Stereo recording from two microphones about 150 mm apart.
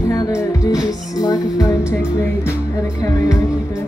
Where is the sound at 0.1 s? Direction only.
25° left (ahead or behind).